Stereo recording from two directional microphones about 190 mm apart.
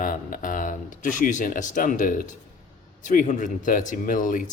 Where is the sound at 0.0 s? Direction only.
45° left (ahead or behind).